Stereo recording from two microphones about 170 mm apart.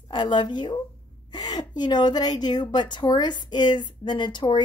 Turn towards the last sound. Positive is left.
turn(degrees=25)  # may be behind; listen again after turning